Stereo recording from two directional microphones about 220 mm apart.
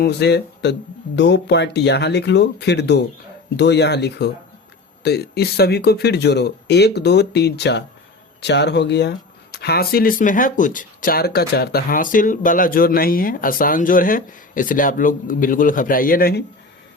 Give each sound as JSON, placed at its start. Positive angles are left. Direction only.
{"t": 0.0, "sound": "speech", "side_deg": 50}